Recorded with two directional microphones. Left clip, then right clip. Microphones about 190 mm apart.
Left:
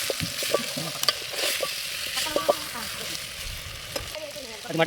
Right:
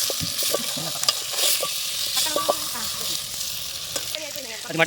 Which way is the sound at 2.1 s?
25° left (ahead or behind).